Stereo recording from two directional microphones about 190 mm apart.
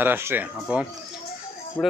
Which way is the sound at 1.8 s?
5° left (ahead or behind).